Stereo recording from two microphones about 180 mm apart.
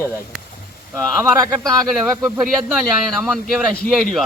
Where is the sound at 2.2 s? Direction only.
10° right (ahead or behind).